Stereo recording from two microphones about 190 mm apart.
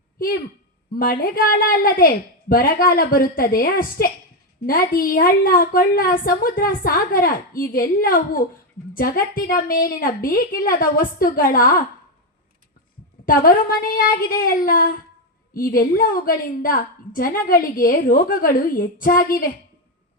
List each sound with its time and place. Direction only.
0.9 s a woman's voice: 50° left (ahead or behind)
13.2 s a woman's voice: 50° left (ahead or behind)